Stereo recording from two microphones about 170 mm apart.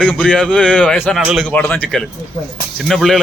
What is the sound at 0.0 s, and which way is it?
A man's voice, 5° left (ahead or behind).